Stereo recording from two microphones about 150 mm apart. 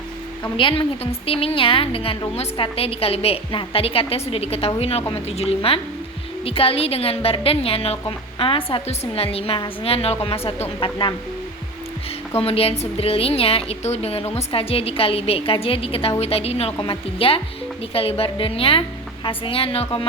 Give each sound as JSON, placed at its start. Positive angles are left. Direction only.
{"t": 0.5, "sound": "a woman's voice", "side_deg": 35}
{"t": 12.4, "sound": "a woman's voice", "side_deg": 40}